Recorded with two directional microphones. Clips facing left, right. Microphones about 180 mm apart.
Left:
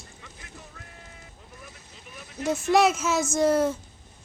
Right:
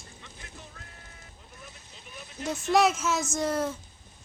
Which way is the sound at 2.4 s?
5° left (ahead or behind).